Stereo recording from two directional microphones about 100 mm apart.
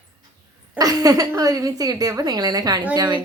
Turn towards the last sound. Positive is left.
turn(degrees=-45)  # may be behind; listen again after turning